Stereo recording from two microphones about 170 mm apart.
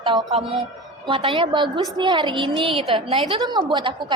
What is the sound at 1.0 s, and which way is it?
A woman's voice, 30° right (ahead or behind).